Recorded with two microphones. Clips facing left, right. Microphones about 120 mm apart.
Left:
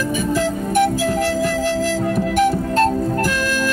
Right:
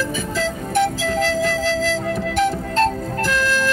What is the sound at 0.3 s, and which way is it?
Music, 15° left (ahead or behind).